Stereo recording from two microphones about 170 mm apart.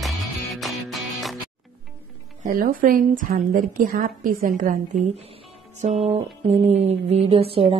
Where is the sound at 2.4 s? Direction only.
55° right (ahead or behind).